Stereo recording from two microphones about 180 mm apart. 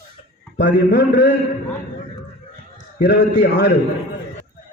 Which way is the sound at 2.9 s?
70° left (ahead or behind).